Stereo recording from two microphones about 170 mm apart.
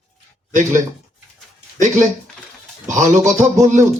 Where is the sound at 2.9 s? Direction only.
45° right (ahead or behind).